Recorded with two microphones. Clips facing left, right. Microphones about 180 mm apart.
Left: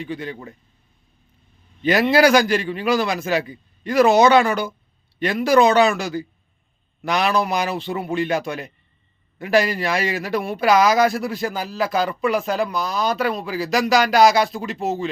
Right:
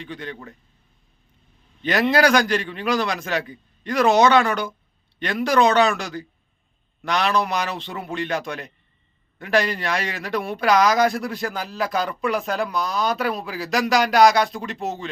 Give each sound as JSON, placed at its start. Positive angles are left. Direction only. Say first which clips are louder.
{"t": 0.0, "sound": "a man's voice", "louder": "left 4 dB", "side_deg": 10}
{"t": 1.8, "sound": "a man's voice", "louder": "left 3 dB", "side_deg": 5}